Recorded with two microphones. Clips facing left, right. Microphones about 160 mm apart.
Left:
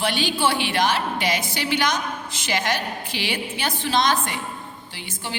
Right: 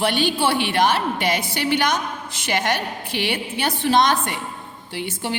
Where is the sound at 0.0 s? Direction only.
55° right (ahead or behind).